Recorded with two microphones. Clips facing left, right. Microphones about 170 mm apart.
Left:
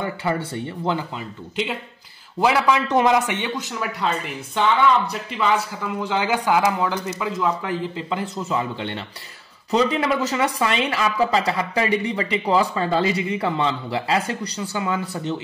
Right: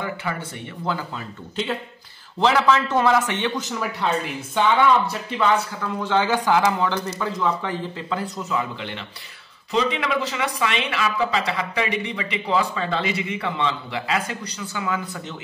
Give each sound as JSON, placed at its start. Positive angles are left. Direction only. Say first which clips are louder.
{"t": 0.0, "sound": "speech", "louder": "left 4 dB", "side_deg": 35}
{"t": 0.8, "sound": "a man's voice", "louder": "left 1 dB", "side_deg": 15}
{"t": 3.5, "sound": "speech", "louder": "right 1 dB", "side_deg": 0}
{"t": 5.9, "sound": "a man's voice", "louder": "right 2 dB", "side_deg": 10}
{"t": 8.1, "sound": "speech", "louder": "even", "side_deg": 25}